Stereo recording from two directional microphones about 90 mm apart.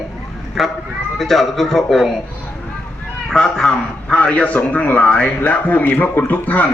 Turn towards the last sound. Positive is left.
turn(degrees=20)  # may be behind; listen again after turning